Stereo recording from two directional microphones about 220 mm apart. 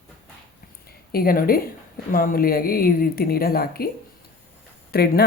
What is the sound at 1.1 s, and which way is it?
A woman's voice, 40° left (ahead or behind).